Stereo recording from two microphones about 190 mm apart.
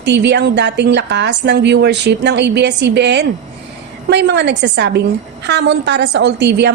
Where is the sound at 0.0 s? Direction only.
65° right (ahead or behind).